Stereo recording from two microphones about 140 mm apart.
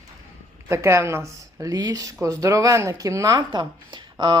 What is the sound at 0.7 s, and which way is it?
Speech, 20° right (ahead or behind).